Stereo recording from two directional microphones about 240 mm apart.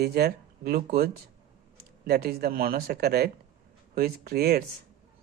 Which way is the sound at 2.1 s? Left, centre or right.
Right.